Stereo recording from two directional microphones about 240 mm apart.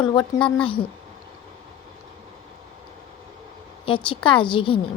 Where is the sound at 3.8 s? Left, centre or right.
Left.